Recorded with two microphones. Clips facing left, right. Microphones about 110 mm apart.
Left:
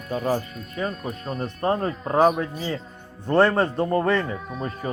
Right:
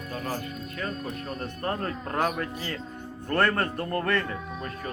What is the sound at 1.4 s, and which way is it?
Speech, 15° left (ahead or behind).